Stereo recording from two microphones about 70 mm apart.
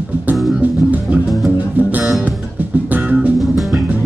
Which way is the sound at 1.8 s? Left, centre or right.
Right.